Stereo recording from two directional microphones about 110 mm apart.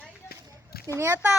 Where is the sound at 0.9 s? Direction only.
20° right (ahead or behind).